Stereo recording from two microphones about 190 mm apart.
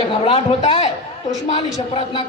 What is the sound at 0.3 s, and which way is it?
Speech, 30° left (ahead or behind).